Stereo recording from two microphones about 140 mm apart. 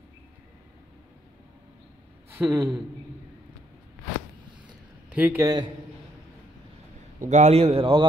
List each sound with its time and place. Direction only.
2.3 s a woman's voice: 15° right (ahead or behind)
5.1 s a man's voice: 10° right (ahead or behind)
5.4 s a man's voice: 30° right (ahead or behind)
7.2 s a man's voice: 55° right (ahead or behind); by 8.1 s 40° right (ahead or behind)